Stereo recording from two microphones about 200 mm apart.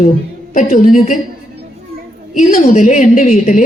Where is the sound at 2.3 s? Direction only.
40° left (ahead or behind).